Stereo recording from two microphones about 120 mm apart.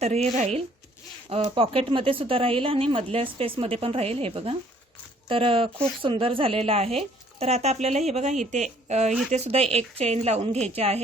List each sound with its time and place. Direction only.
0.0 s a woman's voice: 65° right (ahead or behind)
9.3 s a woman's voice: 60° right (ahead or behind)